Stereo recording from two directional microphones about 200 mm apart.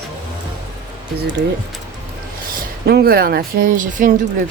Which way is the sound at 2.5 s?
55° right (ahead or behind).